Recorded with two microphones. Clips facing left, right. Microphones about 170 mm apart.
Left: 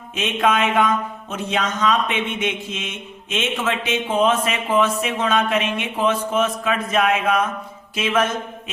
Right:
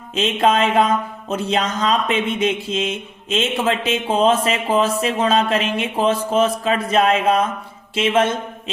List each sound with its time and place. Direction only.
0.1 s speech: 30° right (ahead or behind)